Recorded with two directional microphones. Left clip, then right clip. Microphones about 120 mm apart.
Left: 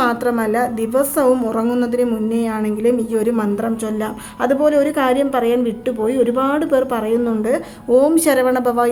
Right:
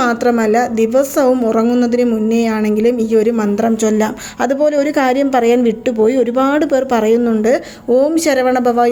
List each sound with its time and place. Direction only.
0.0 s a woman's voice: 30° right (ahead or behind)
3.6 s a woman's voice: 45° right (ahead or behind); by 8.9 s 20° right (ahead or behind)